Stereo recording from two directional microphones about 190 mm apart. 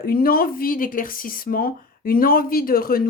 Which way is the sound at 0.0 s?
50° left (ahead or behind).